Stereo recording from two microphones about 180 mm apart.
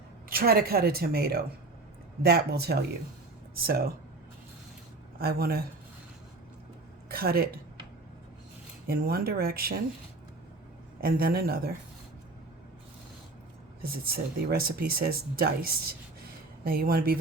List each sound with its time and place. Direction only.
0.3 s speech: 55° right (ahead or behind)
5.2 s speech: 60° right (ahead or behind)
7.1 s speech: 55° right (ahead or behind)
8.9 s speech: 60° right (ahead or behind)
11.0 s speech: 55° right (ahead or behind)
13.8 s speech: 55° right (ahead or behind)